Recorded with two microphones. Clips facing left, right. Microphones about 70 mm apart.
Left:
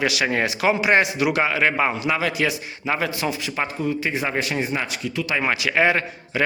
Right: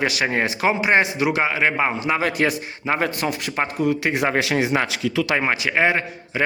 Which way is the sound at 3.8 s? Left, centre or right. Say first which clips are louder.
Right 5 dB; right.